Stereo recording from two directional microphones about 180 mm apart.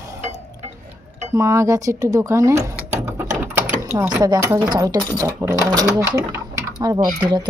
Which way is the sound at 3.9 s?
15° right (ahead or behind).